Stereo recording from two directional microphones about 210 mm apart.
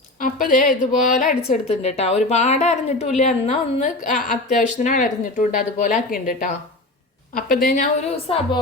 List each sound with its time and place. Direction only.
0.2 s speech: 40° left (ahead or behind)
1.5 s speech: 30° left (ahead or behind)
7.5 s a woman's voice: 45° left (ahead or behind)
8.1 s a woman's voice: 25° left (ahead or behind)